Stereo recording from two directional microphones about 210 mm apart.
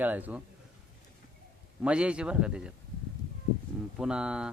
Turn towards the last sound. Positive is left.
turn(degrees=-5)  # may be behind; listen again after turning